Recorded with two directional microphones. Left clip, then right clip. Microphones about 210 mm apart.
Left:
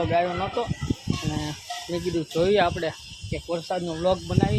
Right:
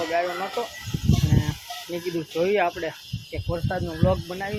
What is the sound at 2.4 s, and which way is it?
Speech, 15° left (ahead or behind).